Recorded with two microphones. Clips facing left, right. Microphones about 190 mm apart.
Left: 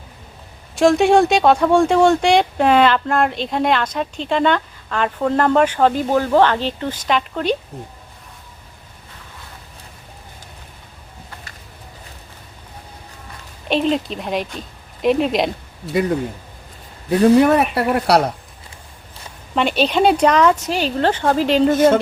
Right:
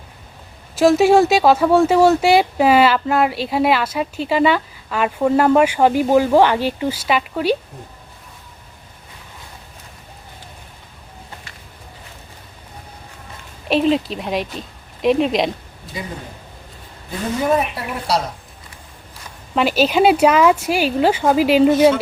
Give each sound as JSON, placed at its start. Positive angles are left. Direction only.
{"t": 0.8, "sound": "speech", "side_deg": -5}
{"t": 13.7, "sound": "speech", "side_deg": 0}
{"t": 17.1, "sound": "speech", "side_deg": 70}
{"t": 19.5, "sound": "speech", "side_deg": -5}